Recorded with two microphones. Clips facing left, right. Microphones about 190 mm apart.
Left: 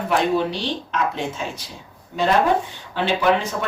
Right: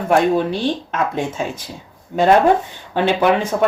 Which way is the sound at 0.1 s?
50° right (ahead or behind).